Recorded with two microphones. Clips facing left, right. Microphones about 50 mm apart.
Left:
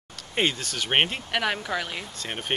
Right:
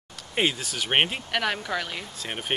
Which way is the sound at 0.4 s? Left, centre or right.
Centre.